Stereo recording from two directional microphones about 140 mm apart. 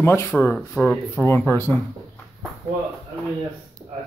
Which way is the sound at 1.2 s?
20° left (ahead or behind).